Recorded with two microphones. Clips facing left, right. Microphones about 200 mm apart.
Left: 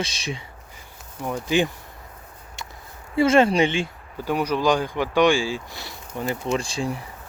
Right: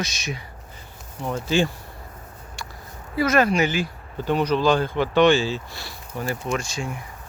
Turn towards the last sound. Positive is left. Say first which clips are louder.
# left 3 dB
turn(degrees=30)  # may be behind; listen again after turning